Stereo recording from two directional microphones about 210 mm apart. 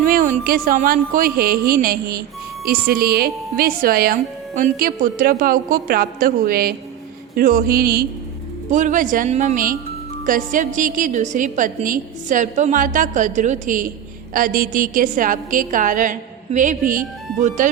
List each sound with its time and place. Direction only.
0.0 s a woman's voice: 40° right (ahead or behind)